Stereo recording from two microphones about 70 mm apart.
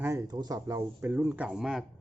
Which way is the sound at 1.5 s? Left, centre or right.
Centre.